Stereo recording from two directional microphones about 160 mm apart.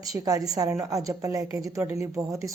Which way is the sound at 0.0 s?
20° right (ahead or behind).